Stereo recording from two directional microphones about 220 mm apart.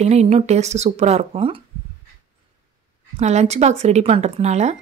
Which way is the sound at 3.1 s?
30° right (ahead or behind).